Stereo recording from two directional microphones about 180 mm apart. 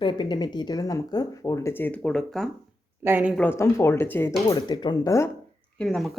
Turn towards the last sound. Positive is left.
turn(degrees=0)  # may be behind; listen again after turning